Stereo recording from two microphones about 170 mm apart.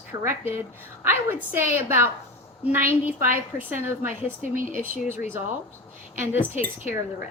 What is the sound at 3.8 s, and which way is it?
Speech, 15° right (ahead or behind).